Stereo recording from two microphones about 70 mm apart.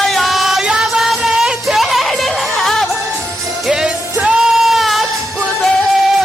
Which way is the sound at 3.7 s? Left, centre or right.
Centre.